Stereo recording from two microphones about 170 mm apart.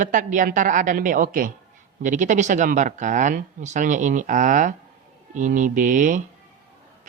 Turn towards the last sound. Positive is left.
turn(degrees=-50)  # may be behind; listen again after turning